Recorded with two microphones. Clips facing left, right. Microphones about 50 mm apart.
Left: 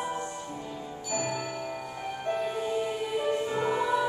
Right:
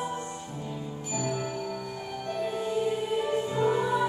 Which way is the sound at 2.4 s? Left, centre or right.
Centre.